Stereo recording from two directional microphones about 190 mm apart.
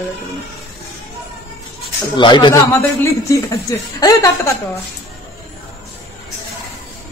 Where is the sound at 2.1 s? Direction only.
25° left (ahead or behind).